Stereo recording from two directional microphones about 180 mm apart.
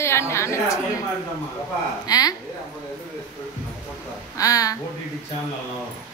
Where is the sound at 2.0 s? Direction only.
20° left (ahead or behind).